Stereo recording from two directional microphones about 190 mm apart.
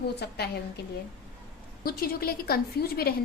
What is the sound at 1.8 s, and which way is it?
A woman's voice, 55° left (ahead or behind).